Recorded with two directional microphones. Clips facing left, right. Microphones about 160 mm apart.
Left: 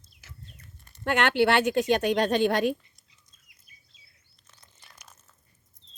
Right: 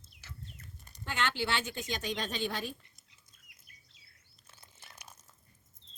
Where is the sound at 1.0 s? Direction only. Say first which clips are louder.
Left 12 dB; 65° left (ahead or behind).